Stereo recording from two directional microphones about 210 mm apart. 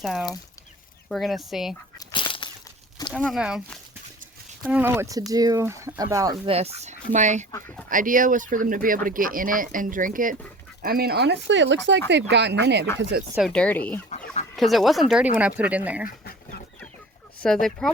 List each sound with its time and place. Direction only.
0.0 s speech: centre (ahead or behind)
2.0 s a sound: 25° left (ahead or behind)
3.1 s speech: centre (ahead or behind); by 6.5 s 15° right (ahead or behind)
6.5 s speech: 30° right (ahead or behind)
7.5 s speech: 5° left (ahead or behind)
7.9 s speech: 40° right (ahead or behind)
13.3 s speech: centre (ahead or behind)
16.0 s chicken: 45° left (ahead or behind)
17.4 s speech: 5° left (ahead or behind)